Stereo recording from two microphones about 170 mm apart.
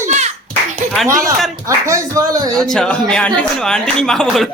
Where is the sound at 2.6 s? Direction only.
5° left (ahead or behind).